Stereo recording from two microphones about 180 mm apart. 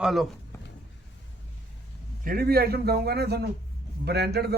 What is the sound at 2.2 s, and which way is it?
A man's voice, 55° right (ahead or behind).